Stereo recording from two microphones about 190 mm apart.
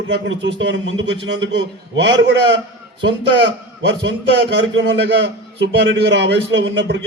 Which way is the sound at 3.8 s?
75° right (ahead or behind).